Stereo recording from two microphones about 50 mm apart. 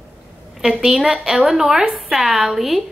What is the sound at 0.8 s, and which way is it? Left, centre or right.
A woman's voice, centre.